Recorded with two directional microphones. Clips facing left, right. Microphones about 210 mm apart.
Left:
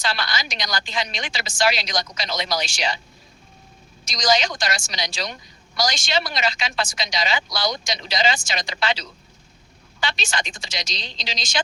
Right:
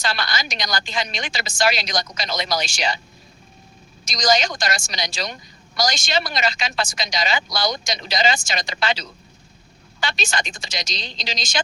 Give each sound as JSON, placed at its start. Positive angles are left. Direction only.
{"t": 0.0, "sound": "speech", "side_deg": -45}
{"t": 4.0, "sound": "speech", "side_deg": -45}